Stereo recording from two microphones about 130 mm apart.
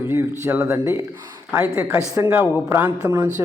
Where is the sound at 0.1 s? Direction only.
20° right (ahead or behind).